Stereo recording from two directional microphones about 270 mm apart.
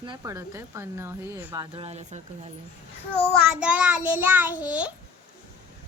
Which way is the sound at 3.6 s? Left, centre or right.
Centre.